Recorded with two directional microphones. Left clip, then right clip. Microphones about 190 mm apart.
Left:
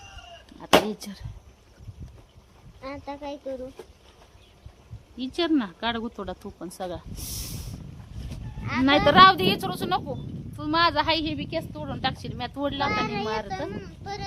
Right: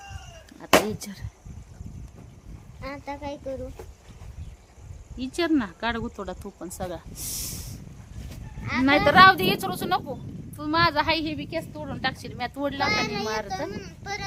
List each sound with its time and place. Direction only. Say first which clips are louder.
0.6 s a sound: even; centre (ahead or behind)
2.8 s speech: right 1 dB; 30° right (ahead or behind)
5.1 s speech: even; centre (ahead or behind)
12.9 s a child's voice: right 1 dB; 15° right (ahead or behind)